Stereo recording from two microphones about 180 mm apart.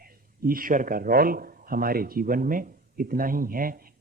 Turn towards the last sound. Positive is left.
turn(degrees=-50)  # may be behind; listen again after turning